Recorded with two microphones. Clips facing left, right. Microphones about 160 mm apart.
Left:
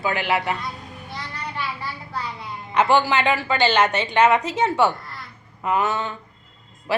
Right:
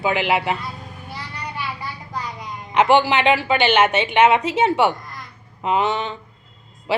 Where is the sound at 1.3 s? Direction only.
10° right (ahead or behind).